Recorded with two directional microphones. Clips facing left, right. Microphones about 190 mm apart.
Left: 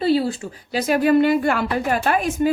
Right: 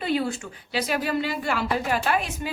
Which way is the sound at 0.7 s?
45° left (ahead or behind).